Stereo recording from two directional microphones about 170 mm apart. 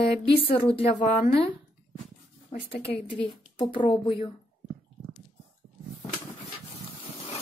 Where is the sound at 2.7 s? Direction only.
30° left (ahead or behind).